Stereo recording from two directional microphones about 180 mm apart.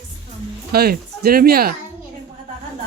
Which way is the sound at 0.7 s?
60° right (ahead or behind).